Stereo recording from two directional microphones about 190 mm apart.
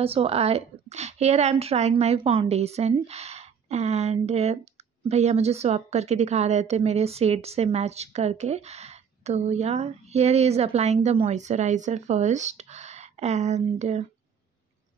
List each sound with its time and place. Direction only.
0.0 s a woman's voice: 30° right (ahead or behind)